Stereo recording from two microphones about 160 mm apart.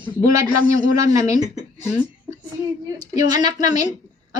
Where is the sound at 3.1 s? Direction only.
25° right (ahead or behind).